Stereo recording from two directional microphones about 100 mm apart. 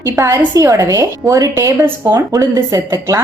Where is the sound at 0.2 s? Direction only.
30° right (ahead or behind).